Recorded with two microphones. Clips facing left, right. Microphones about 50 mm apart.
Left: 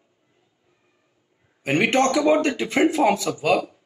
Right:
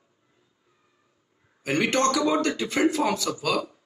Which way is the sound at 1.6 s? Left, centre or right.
Left.